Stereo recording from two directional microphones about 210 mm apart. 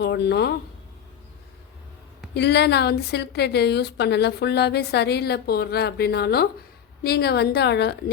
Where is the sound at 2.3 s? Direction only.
55° left (ahead or behind).